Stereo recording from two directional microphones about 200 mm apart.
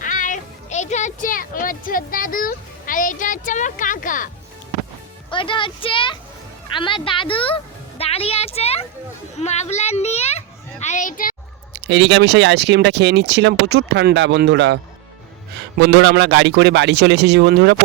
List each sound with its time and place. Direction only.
0.0 s speech: 40° left (ahead or behind)
5.3 s a woman's voice: 25° left (ahead or behind); by 11.3 s 40° left (ahead or behind)
11.7 s speech: 60° right (ahead or behind)
15.8 s speech: 60° right (ahead or behind)